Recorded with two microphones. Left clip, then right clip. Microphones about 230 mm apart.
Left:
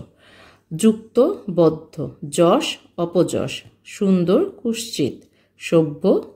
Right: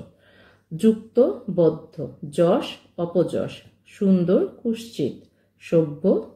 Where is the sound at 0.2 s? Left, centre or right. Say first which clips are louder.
Left 6 dB; left.